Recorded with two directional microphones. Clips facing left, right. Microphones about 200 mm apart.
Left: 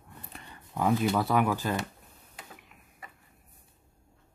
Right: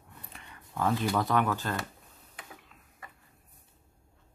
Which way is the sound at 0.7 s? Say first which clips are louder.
Left 2 dB; 10° left (ahead or behind).